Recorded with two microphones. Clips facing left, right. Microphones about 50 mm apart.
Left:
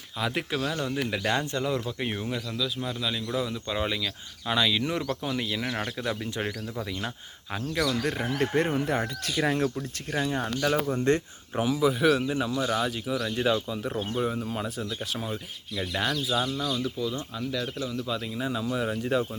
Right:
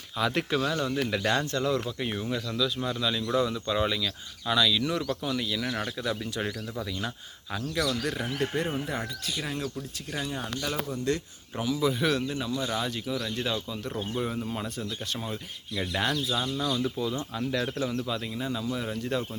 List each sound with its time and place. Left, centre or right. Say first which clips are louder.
0.2 s speech: right 2 dB; centre; by 6.5 s left
6.5 s speech: left 1 dB; centre
6.8 s speech: even; left
8.0 s speech: left 2 dB; left
8.4 s speech: left 6 dB; left
10.1 s speech: left 5 dB; left
11.5 s speech: left 3 dB; centre
11.9 s speech: left 5 dB; centre
16.8 s speech: right 1 dB; centre
18.0 s speech: left 1 dB; centre
18.3 s speech: left 2 dB; centre